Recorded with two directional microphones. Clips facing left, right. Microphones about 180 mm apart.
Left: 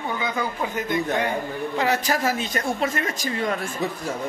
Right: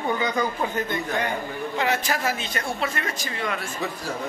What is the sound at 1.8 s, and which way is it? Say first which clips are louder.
Speech: left 2 dB; 40° left (ahead or behind).